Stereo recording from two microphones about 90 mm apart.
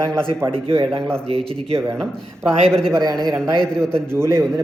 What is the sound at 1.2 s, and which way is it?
Speech, 90° right.